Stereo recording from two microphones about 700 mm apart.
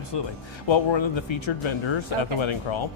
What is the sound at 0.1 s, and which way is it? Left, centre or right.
A man's voice, left.